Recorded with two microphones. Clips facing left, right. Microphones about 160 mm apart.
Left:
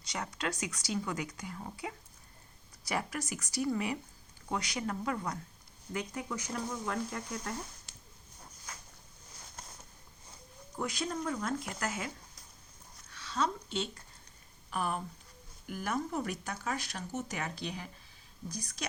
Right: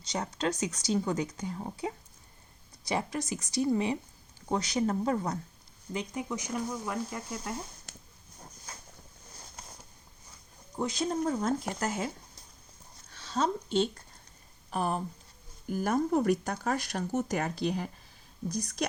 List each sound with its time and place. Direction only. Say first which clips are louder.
0.1 s speech: right 5 dB; 25° right (ahead or behind)
2.9 s speech: right 4 dB; 25° right (ahead or behind)
5.9 s speech: right 3 dB; 20° right (ahead or behind)
7.9 s a sound: right 6 dB; 45° right (ahead or behind)
8.7 s boat: even; 30° right (ahead or behind)
10.8 s speech: right 5 dB; 25° right (ahead or behind)
13.1 s a sound: right 3 dB; 30° right (ahead or behind)
14.7 s speech: right 4 dB; 35° right (ahead or behind)